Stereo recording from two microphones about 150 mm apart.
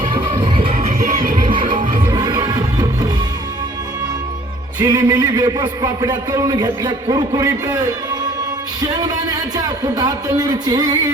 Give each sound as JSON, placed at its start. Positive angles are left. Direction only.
{"t": 0.0, "sound": "music", "side_deg": -35}
{"t": 0.9, "sound": "music", "side_deg": -65}
{"t": 2.0, "sound": "music", "side_deg": -30}
{"t": 4.8, "sound": "a man's voice", "side_deg": -25}
{"t": 9.6, "sound": "a man's voice", "side_deg": -25}